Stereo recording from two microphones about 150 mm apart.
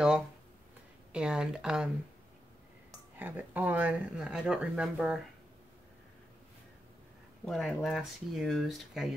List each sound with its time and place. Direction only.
1.1 s speech: 5° right (ahead or behind)
3.2 s speech: 10° right (ahead or behind)
7.4 s speech: centre (ahead or behind)